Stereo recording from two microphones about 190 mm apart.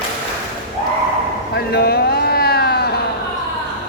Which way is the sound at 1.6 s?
55° left (ahead or behind).